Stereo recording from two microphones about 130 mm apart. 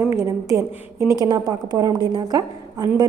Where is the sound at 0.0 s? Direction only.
20° right (ahead or behind).